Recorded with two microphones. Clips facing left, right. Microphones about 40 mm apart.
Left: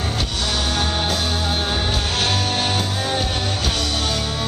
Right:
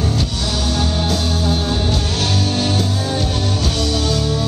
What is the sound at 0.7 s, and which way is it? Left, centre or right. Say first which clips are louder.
Music: right 4 dB; left.